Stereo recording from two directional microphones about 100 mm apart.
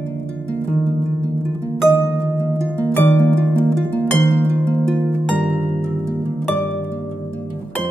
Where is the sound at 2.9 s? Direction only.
20° left (ahead or behind).